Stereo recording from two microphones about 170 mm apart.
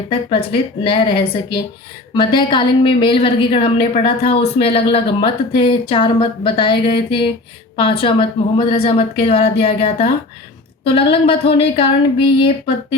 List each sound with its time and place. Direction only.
0.9 s a woman's voice: 35° left (ahead or behind)